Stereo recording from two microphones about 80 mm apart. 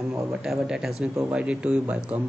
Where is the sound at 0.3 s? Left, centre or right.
Centre.